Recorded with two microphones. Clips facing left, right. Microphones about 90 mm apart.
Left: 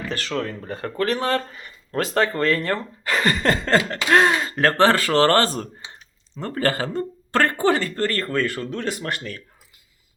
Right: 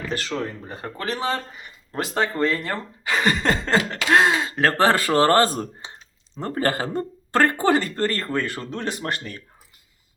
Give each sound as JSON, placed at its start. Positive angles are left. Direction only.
{"t": 0.3, "sound": "speech", "side_deg": -15}